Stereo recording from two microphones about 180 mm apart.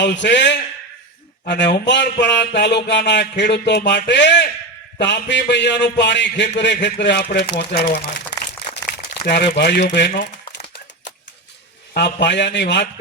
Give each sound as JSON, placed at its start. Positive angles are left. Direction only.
{"t": 0.0, "sound": "speech", "side_deg": 75}
{"t": 11.9, "sound": "speech", "side_deg": 70}